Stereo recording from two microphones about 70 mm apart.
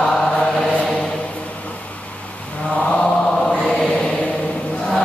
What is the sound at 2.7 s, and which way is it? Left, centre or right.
Mantra, centre.